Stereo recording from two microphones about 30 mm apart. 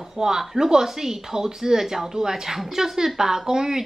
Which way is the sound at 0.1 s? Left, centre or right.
Centre.